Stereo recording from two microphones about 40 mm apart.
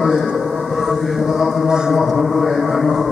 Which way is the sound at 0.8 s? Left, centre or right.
Centre.